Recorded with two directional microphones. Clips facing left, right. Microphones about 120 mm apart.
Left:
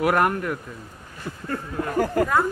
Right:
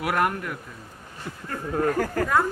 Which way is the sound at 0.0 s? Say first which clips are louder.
Left 4 dB; 40° left (ahead or behind).